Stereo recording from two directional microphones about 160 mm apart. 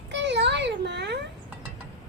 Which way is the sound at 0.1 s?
90° right.